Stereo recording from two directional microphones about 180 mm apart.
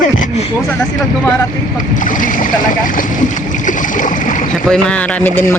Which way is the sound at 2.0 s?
45° left (ahead or behind).